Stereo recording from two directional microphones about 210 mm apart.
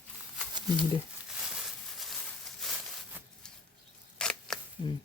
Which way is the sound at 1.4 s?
5° right (ahead or behind).